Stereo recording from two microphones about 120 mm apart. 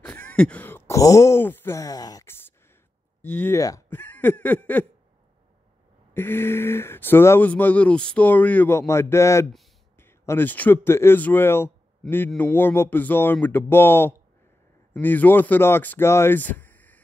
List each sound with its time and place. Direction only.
0.0 s speech: 10° left (ahead or behind); by 2.2 s 30° left (ahead or behind)
2.2 s a sound: 20° left (ahead or behind)
3.2 s speech: 15° left (ahead or behind)
3.5 s speech: 30° left (ahead or behind)
3.9 s a sound: 15° left (ahead or behind)
6.1 s speech: 20° left (ahead or behind)
12.0 s speech: centre (ahead or behind)
12.4 s speech: 15° left (ahead or behind)